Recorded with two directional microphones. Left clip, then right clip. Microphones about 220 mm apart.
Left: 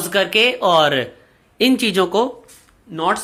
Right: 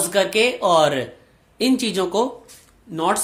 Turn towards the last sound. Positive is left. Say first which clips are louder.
# left 2 dB
turn(degrees=-15)  # may be behind; listen again after turning